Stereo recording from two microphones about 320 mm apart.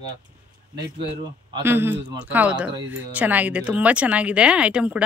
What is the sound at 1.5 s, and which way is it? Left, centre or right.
Speech, centre.